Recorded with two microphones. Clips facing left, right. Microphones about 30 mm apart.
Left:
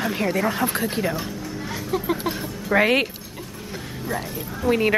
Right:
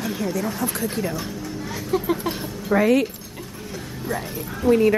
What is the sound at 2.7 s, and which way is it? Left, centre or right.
Speech, left.